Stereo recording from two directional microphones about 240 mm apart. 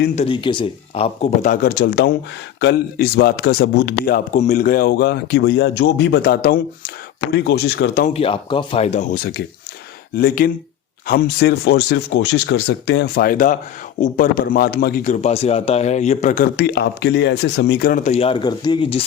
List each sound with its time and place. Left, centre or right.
0.3 s a man's voice: left
8.1 s a man's voice: left